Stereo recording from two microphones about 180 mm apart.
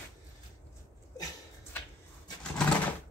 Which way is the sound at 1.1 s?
20° left (ahead or behind).